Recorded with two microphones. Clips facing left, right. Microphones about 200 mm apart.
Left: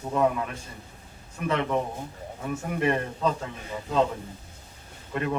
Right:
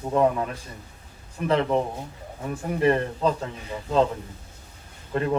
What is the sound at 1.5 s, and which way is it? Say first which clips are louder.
Speech: right 4 dB; 30° right (ahead or behind).